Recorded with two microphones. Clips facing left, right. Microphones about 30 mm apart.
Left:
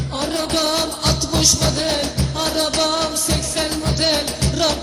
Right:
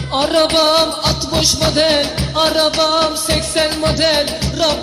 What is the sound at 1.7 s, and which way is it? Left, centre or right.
Music, right.